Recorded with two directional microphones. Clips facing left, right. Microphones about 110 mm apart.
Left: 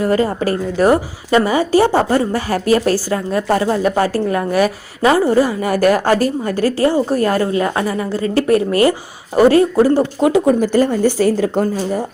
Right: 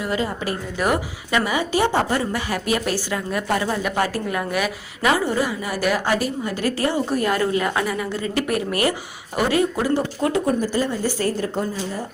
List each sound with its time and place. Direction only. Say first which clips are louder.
0.0 s a woman's voice: left 9 dB; 40° left (ahead or behind)
5.6 s a woman's voice: left 8 dB; 50° left (ahead or behind)
10.2 s speech: left 8 dB; 80° left
11.0 s a woman's voice: left 9 dB; 90° left